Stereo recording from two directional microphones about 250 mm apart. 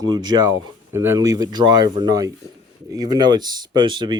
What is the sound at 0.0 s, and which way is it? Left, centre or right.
Speech, centre.